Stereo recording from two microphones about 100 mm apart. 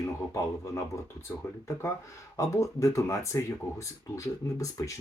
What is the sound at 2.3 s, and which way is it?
Speech, 30° left (ahead or behind).